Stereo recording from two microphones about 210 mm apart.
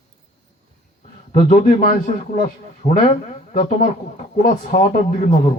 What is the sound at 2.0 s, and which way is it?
A man's voice, 35° left (ahead or behind).